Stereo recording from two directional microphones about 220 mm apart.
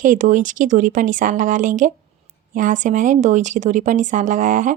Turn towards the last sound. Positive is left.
turn(degrees=-35)  # may be behind; listen again after turning